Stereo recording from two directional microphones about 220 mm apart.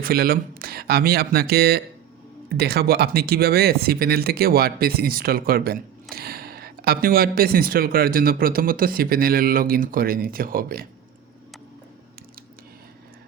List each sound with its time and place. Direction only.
0.0 s speech: 45° right (ahead or behind)